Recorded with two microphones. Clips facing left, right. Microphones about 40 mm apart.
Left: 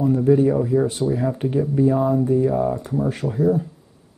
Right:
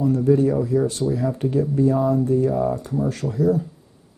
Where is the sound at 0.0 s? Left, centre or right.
Left.